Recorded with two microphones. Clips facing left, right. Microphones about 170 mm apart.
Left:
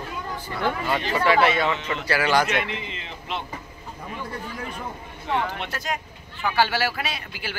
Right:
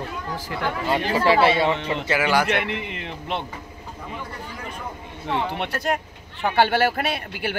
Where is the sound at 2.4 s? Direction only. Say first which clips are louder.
Right 2 dB; 65° right (ahead or behind).